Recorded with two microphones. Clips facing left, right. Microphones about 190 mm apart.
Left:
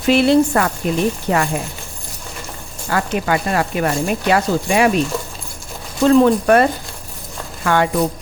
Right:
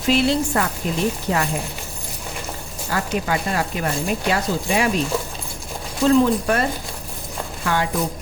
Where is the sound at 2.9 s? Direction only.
65° left (ahead or behind).